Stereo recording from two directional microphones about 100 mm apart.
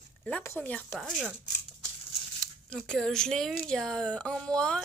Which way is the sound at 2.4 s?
5° left (ahead or behind).